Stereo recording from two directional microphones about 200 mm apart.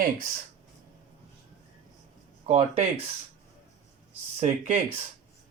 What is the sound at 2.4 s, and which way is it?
Speech, 30° right (ahead or behind).